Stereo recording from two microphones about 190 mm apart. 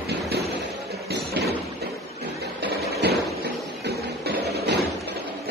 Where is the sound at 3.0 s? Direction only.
60° right (ahead or behind).